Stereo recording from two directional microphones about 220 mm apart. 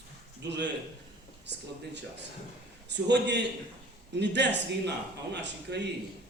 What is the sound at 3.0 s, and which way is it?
A man's voice, 50° right (ahead or behind).